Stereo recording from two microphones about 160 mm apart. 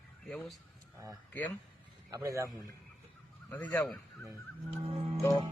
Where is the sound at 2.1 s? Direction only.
20° right (ahead or behind).